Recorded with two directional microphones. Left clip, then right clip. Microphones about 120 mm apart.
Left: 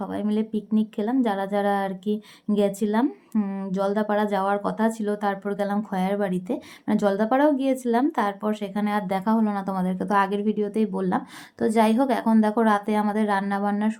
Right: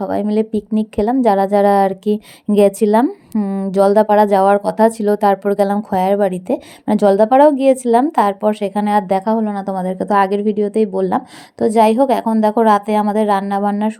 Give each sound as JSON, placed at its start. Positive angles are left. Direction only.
{"t": 0.0, "sound": "speech", "side_deg": -50}
{"t": 3.3, "sound": "a woman's voice", "side_deg": -35}
{"t": 3.7, "sound": "a woman's voice", "side_deg": -65}